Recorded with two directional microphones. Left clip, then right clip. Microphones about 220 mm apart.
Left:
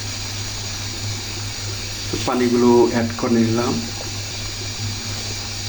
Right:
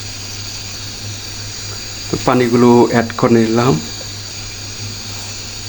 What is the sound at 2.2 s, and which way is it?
Speech, 45° right (ahead or behind).